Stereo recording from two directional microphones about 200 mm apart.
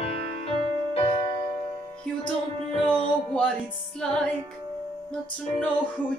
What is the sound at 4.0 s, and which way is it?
Speech, 5° left (ahead or behind).